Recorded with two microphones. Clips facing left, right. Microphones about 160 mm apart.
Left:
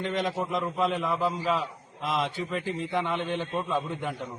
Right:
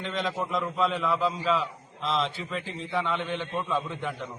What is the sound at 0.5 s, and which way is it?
A man's voice, 15° left (ahead or behind).